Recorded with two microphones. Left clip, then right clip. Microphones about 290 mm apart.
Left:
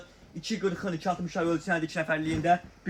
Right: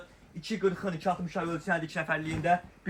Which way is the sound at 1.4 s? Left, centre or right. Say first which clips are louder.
Left 3 dB; centre.